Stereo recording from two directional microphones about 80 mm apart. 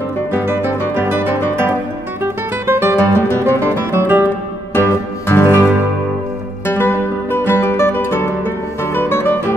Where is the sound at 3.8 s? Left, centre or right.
Right.